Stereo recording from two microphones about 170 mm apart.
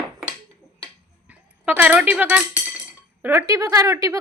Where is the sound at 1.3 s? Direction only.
10° right (ahead or behind).